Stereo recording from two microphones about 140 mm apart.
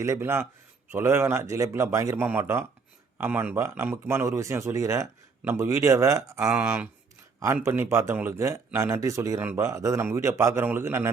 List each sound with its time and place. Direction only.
0.0 s a man's voice: 20° right (ahead or behind)